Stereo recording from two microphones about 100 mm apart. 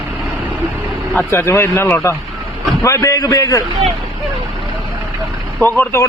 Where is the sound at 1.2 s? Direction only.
25° left (ahead or behind).